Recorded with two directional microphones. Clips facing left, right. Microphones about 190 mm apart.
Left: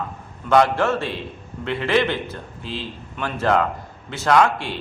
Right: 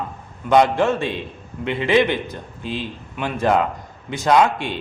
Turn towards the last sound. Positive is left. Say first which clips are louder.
# right 1 dB
turn(degrees=-20)  # may be behind; listen again after turning